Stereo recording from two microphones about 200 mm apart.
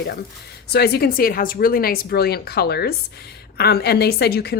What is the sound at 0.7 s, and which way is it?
A woman's voice, 50° left (ahead or behind).